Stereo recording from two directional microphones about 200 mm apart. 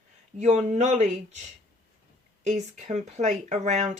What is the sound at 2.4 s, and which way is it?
Speech, 35° right (ahead or behind).